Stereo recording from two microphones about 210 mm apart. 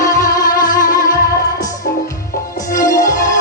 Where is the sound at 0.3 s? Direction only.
20° left (ahead or behind).